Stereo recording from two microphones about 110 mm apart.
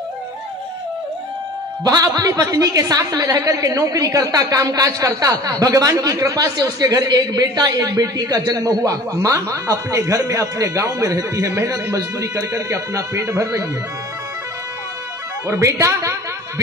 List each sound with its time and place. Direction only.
1.9 s a woman's voice: 35° right (ahead or behind)
15.4 s a woman's voice: 25° right (ahead or behind)